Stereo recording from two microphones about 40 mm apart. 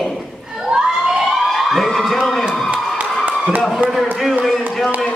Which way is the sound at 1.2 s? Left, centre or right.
Centre.